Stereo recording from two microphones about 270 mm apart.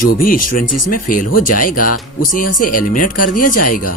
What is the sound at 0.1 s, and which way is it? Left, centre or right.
Speech, left.